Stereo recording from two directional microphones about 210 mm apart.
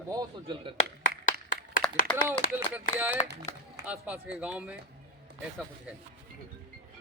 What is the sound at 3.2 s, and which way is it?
Speech, 25° left (ahead or behind).